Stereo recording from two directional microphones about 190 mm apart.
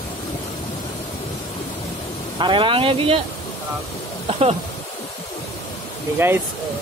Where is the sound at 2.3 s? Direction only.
25° right (ahead or behind).